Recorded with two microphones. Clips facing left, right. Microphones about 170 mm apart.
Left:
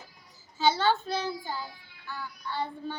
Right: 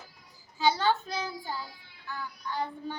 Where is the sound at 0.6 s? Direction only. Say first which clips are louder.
Left 1 dB; 10° right (ahead or behind).